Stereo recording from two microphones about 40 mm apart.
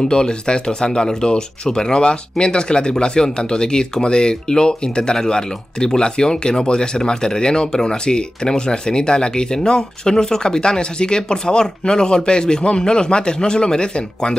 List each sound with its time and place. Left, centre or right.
0.1 s speech: left